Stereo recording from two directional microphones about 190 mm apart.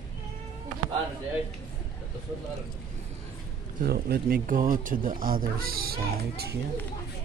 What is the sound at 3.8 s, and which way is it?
Speech, 55° right (ahead or behind).